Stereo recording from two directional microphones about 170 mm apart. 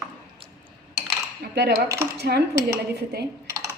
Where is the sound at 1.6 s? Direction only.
80° right.